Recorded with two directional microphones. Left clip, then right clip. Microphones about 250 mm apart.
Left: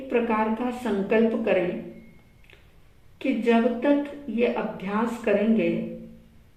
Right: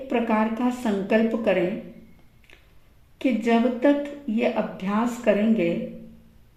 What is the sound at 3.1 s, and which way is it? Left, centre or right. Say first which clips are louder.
Speech: even; right.